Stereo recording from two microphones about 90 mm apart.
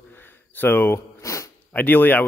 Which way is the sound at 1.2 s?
35° left (ahead or behind).